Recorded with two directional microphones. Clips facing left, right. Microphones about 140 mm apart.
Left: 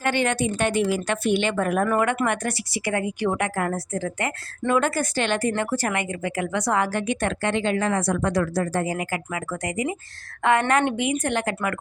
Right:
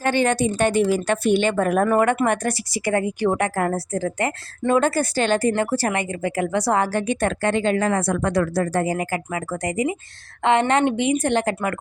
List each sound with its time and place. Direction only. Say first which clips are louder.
0.0 s a woman's voice: right 3 dB; 35° right (ahead or behind)